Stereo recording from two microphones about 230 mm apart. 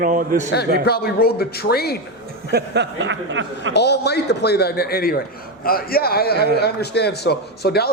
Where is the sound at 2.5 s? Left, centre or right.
Right.